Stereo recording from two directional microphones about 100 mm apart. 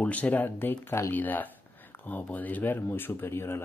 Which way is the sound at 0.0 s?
15° left (ahead or behind).